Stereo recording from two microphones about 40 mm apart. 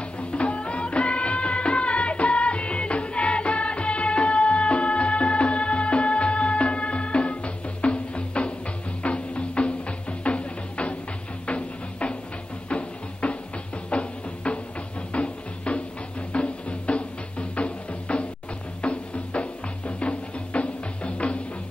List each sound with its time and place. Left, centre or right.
0.2 s music: left